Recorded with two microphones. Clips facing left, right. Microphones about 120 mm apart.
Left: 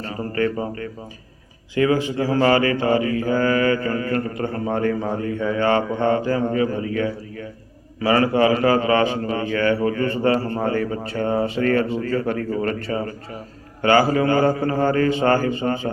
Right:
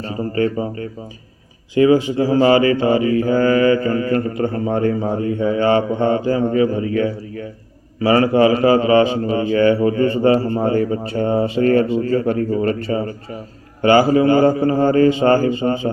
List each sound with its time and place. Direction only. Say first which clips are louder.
0.0 s a man's voice: right 3 dB; 25° right (ahead or behind)
5.0 s a man's voice: right 4 dB; 25° right (ahead or behind)
6.5 s a man's voice: right 5 dB; 45° left (ahead or behind)
8.0 s a man's voice: right 4 dB; 25° right (ahead or behind)